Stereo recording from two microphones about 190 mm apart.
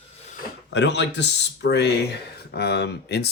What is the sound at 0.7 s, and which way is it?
Speech, 70° left (ahead or behind).